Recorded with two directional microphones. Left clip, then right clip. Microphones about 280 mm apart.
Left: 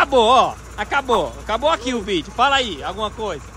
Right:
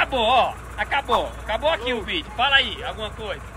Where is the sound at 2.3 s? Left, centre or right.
Centre.